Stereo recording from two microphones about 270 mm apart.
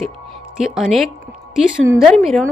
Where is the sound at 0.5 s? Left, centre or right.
Centre.